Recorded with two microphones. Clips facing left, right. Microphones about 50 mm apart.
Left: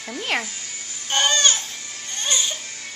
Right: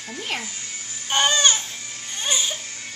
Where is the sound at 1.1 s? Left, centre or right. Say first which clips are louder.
Right 1 dB; centre.